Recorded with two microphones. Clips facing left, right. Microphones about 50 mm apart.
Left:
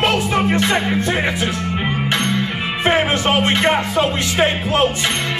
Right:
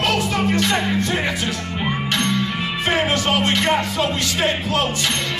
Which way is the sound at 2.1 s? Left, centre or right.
Left.